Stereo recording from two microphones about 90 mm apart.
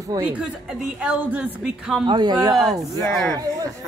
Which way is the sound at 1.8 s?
5° right (ahead or behind).